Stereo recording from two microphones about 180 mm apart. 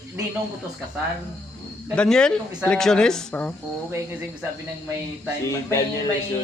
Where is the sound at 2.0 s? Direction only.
5° left (ahead or behind).